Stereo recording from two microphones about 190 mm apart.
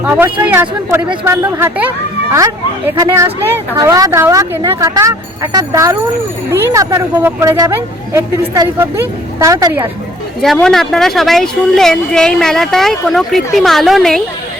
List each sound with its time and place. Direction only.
0.0 s speech: 10° right (ahead or behind)
10.4 s speech: centre (ahead or behind)